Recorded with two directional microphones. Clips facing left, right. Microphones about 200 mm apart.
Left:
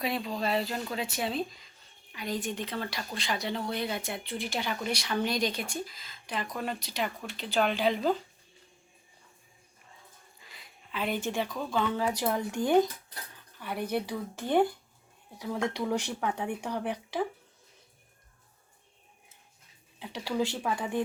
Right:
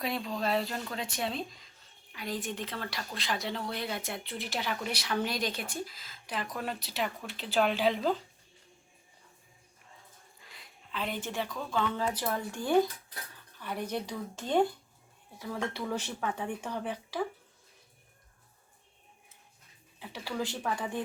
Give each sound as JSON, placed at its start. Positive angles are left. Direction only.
{"t": 0.0, "sound": "speech", "side_deg": 0}
{"t": 10.4, "sound": "a sound", "side_deg": 0}
{"t": 11.2, "sound": "speech", "side_deg": 15}
{"t": 20.0, "sound": "speech", "side_deg": 15}